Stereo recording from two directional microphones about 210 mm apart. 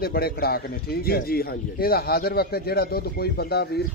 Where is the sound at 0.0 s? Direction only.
45° left (ahead or behind).